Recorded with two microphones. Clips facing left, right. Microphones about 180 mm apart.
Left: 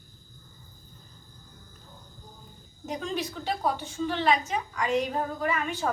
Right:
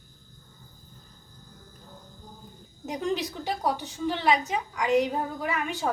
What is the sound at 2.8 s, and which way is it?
A woman's voice, 15° right (ahead or behind).